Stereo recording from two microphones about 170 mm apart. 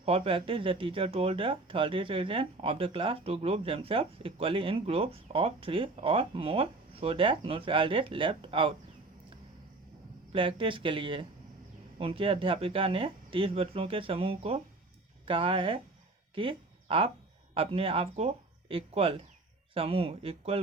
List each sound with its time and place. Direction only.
0.0 s speech: 35° right (ahead or behind)
10.3 s speech: 30° right (ahead or behind)
16.3 s a sound: 30° right (ahead or behind)
17.5 s speech: 35° right (ahead or behind)